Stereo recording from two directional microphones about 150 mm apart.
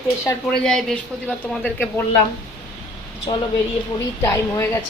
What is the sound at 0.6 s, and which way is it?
A woman's voice, 5° left (ahead or behind).